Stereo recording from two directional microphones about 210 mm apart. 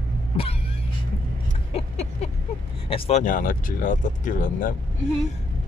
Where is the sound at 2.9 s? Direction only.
30° left (ahead or behind).